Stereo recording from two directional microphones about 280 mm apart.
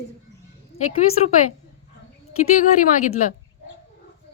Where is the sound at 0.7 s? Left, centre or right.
Left.